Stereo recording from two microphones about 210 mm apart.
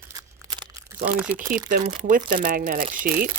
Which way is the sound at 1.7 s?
40° right (ahead or behind).